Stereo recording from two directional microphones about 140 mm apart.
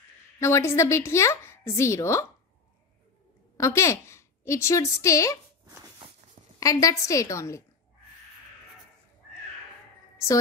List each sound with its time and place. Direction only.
0.4 s a woman's voice: 20° left (ahead or behind)
3.5 s a woman's voice: 20° left (ahead or behind)
6.6 s a woman's voice: 25° left (ahead or behind)